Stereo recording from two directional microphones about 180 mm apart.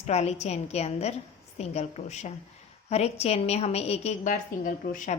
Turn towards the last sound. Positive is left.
turn(degrees=45)  # may be behind; listen again after turning